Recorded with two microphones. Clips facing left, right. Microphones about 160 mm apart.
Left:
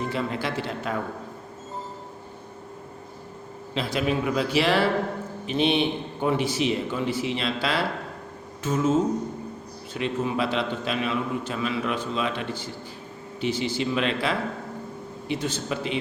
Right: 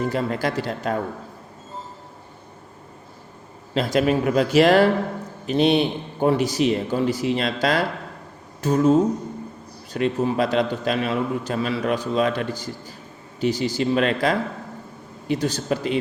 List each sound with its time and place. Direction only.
0.1 s a man's voice: 40° right (ahead or behind)
3.8 s a man's voice: 45° right (ahead or behind)